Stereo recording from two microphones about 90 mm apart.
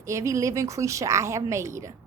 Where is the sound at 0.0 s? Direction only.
35° right (ahead or behind).